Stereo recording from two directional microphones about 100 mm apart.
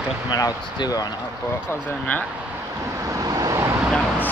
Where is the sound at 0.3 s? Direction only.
40° left (ahead or behind).